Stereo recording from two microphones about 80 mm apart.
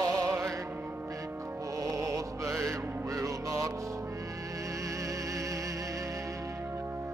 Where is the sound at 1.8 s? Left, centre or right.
Right.